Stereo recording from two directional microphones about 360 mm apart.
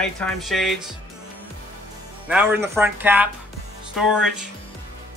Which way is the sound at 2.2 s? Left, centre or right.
Centre.